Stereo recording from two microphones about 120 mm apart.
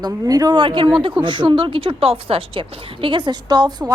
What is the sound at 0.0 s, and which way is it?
A woman's voice, 35° right (ahead or behind).